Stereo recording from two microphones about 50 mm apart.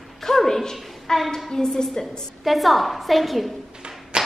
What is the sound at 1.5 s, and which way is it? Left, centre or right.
Speech, centre.